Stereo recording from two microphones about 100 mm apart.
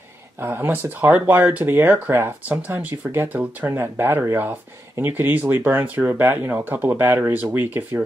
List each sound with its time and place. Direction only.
0.4 s speech: 20° right (ahead or behind)